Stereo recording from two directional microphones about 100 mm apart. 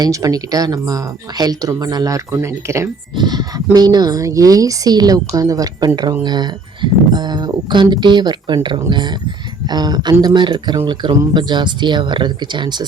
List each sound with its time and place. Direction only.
0.0 s speech: 35° right (ahead or behind)
3.2 s speech: 45° right (ahead or behind)